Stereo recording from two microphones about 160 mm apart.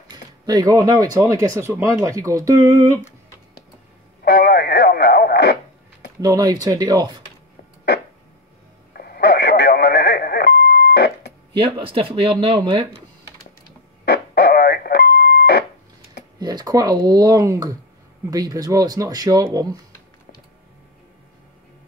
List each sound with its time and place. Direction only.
0.1 s speech: 25° right (ahead or behind)
4.2 s speech: 90° left
6.2 s speech: 25° right (ahead or behind)
8.9 s radio: 70° left (ahead or behind); by 11.3 s 90° left
11.5 s speech: 30° right (ahead or behind)
14.0 s music: 90° left
16.3 s speech: 25° right (ahead or behind)